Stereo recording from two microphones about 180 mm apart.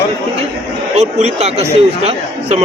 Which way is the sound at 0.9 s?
35° right (ahead or behind).